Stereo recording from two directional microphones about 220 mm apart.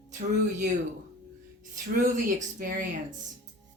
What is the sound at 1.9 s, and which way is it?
Speech, 35° right (ahead or behind).